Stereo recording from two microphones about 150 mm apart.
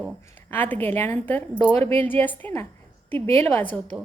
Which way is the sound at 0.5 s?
10° left (ahead or behind).